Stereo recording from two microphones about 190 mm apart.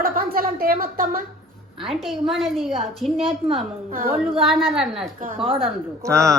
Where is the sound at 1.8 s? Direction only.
Centre (ahead or behind).